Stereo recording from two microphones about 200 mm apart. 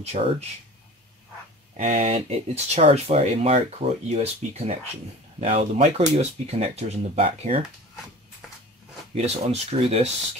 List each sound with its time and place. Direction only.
0.0 s speech: 30° right (ahead or behind)
1.8 s speech: 35° right (ahead or behind)
9.1 s speech: 30° right (ahead or behind)